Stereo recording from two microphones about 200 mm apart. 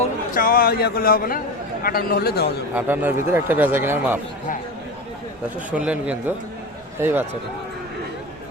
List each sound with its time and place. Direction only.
0.0 s a man's voice: 45° left (ahead or behind)
2.7 s a man's voice: 10° right (ahead or behind)
5.7 s a man's voice: 5° right (ahead or behind)